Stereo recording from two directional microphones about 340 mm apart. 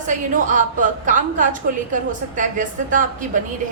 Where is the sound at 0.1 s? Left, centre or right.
Right.